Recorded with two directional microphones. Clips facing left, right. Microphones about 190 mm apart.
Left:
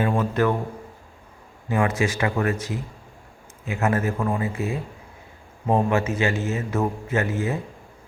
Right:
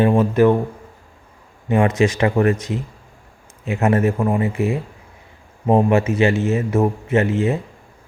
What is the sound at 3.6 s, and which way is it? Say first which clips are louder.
A man's voice: right 6 dB; 25° right (ahead or behind).